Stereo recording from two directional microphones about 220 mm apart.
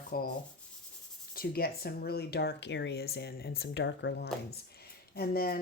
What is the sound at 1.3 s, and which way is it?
A woman's voice, 45° left (ahead or behind).